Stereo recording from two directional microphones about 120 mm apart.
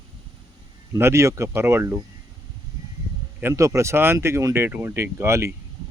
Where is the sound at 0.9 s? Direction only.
20° right (ahead or behind).